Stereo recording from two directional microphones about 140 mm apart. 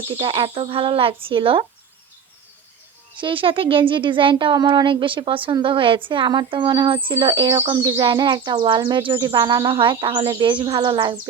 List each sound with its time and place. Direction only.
0.2 s speech: 40° right (ahead or behind)
3.2 s speech: 40° right (ahead or behind)